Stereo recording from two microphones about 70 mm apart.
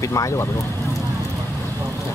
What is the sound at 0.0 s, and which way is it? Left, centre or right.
Speech, left.